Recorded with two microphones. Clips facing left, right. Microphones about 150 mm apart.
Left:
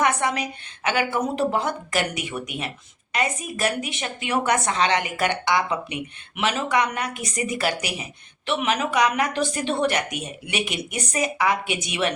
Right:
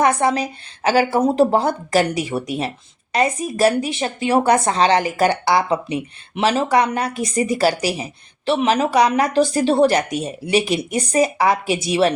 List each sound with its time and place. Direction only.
0.0 s speech: 30° right (ahead or behind)